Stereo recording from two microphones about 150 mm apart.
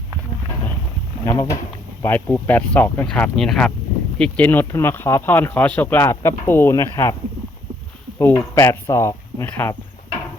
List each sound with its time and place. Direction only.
1.2 s speech: 20° left (ahead or behind)
8.2 s speech: 15° left (ahead or behind)